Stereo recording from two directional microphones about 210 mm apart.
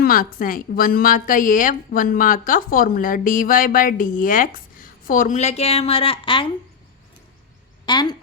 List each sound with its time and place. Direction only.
0.0 s a woman's voice: 45° left (ahead or behind); by 6.5 s 25° left (ahead or behind)
7.9 s a woman's voice: 20° left (ahead or behind)